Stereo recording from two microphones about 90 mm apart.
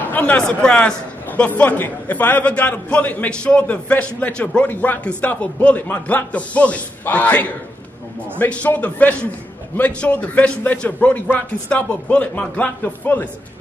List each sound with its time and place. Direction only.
0.1 s a man's voice: 15° left (ahead or behind)